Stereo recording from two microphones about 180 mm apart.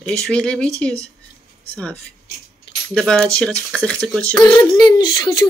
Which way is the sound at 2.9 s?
5° left (ahead or behind).